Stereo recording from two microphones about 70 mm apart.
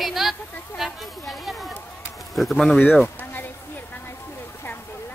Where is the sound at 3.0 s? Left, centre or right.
Left.